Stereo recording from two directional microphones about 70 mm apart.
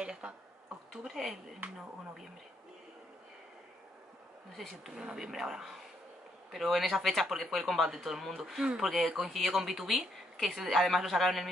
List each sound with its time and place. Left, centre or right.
0.0 s a sound: centre
1.0 s speech: centre
4.6 s speech: centre